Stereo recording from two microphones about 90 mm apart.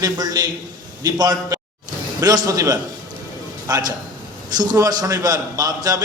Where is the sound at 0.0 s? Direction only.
45° right (ahead or behind).